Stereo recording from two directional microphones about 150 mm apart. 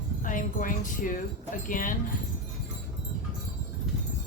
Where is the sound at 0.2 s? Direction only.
60° left (ahead or behind).